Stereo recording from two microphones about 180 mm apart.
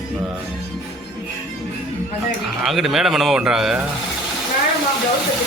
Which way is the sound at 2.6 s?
Centre (ahead or behind).